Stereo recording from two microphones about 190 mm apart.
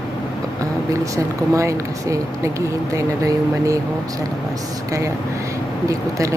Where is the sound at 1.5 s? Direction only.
15° right (ahead or behind).